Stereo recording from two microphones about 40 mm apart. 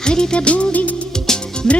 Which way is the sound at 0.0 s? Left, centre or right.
Centre.